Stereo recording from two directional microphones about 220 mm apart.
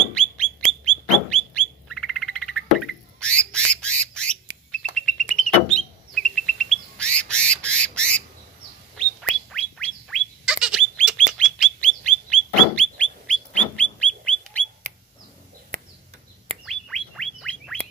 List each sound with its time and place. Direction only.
0.1 s bird: 5° left (ahead or behind)
1.3 s frog: 5° left (ahead or behind)
3.8 s squawk: 5° left (ahead or behind)
4.9 s bird: 5° left (ahead or behind)
9.5 s bird: 5° left (ahead or behind)
15.7 s a sound: 35° right (ahead or behind)
16.6 s chirp tone: centre (ahead or behind)